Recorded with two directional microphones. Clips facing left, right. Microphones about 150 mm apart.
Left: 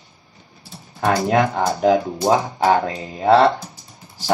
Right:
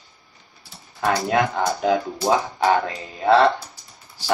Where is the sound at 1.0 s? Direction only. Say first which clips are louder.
Left 3 dB; 30° left (ahead or behind).